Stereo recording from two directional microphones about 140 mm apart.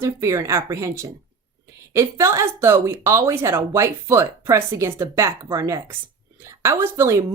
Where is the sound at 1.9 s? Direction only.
20° right (ahead or behind).